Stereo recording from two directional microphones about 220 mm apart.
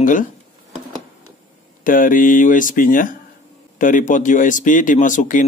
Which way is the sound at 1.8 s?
40° left (ahead or behind).